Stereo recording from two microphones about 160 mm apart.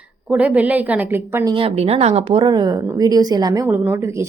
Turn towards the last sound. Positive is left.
turn(degrees=-15)  # may be behind; listen again after turning